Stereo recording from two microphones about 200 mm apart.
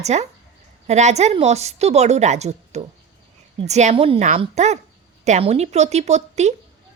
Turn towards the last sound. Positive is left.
turn(degrees=-35)  # may be behind; listen again after turning